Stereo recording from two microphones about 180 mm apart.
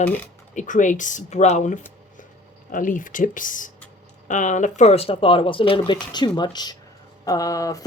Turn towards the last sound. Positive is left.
turn(degrees=20)  # may be behind; listen again after turning